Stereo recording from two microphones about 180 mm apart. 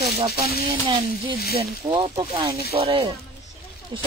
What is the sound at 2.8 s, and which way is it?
Speech, 30° right (ahead or behind).